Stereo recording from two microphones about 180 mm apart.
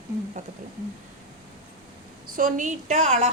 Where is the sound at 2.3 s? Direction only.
45° right (ahead or behind).